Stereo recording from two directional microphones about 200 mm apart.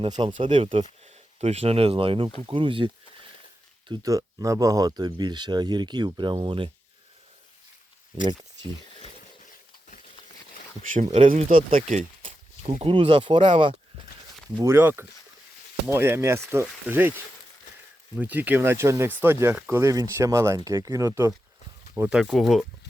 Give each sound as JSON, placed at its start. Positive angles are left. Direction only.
{"t": 0.0, "sound": "speech", "side_deg": -25}
{"t": 11.3, "sound": "speech", "side_deg": -40}
{"t": 18.2, "sound": "speech", "side_deg": -10}